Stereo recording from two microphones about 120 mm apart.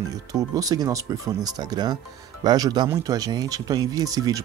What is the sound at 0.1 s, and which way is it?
Speech, 30° right (ahead or behind).